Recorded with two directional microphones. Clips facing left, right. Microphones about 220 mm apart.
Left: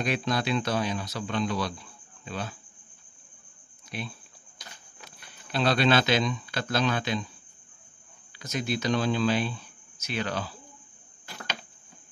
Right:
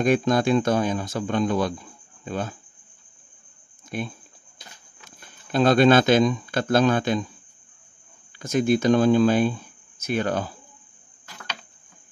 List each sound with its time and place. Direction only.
0.0 s speech: 45° right (ahead or behind)
3.9 s speech: 50° right (ahead or behind)
5.2 s speech: 45° right (ahead or behind)
8.4 s speech: 50° right (ahead or behind)